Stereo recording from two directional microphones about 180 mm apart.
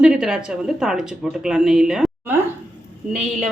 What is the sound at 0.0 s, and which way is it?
A woman's voice, 5° right (ahead or behind).